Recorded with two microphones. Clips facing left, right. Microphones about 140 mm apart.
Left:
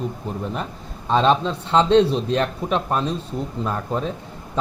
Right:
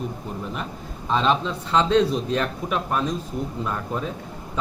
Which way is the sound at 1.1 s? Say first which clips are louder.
Left 4 dB; 35° left (ahead or behind).